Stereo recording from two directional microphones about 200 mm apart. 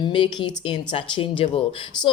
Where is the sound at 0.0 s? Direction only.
25° left (ahead or behind).